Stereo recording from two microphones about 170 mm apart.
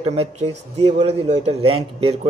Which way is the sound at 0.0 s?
35° right (ahead or behind).